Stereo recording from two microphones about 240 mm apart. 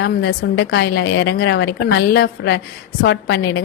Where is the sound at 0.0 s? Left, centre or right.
Left.